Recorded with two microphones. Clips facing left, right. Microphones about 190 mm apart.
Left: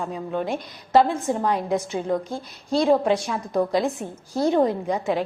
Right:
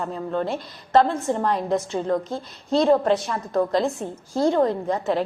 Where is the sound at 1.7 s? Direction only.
15° left (ahead or behind).